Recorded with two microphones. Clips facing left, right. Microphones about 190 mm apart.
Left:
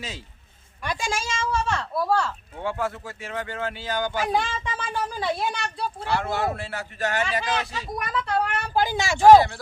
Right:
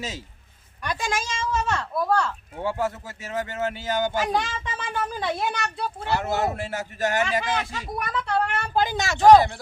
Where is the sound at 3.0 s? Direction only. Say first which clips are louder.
Right 2 dB; 40° right (ahead or behind).